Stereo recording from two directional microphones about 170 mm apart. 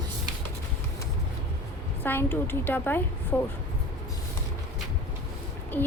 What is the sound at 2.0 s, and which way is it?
A woman's voice, 15° left (ahead or behind).